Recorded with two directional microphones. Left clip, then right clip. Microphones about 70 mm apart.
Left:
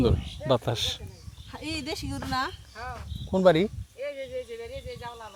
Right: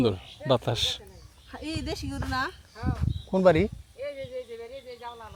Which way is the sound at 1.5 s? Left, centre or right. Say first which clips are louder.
Left 1 dB; centre.